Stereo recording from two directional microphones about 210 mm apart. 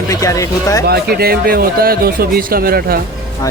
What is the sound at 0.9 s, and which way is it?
Speech, 50° right (ahead or behind).